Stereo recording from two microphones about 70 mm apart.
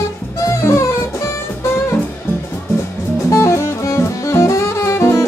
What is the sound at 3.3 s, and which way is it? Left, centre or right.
Music, left.